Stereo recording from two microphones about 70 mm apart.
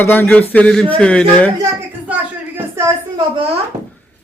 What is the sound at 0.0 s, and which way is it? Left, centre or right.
Speech, left.